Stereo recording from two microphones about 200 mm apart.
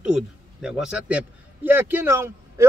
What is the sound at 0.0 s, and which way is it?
A man's voice, 5° right (ahead or behind).